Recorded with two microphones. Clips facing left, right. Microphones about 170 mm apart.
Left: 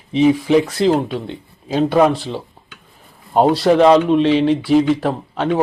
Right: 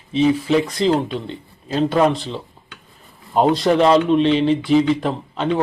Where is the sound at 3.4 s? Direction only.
5° left (ahead or behind).